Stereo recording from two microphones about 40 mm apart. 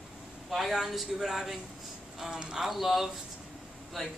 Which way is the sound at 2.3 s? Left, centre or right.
Centre.